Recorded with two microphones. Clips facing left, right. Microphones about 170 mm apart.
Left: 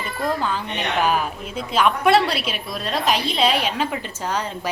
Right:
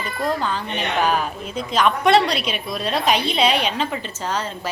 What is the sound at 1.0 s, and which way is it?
A woman's voice, 5° left (ahead or behind).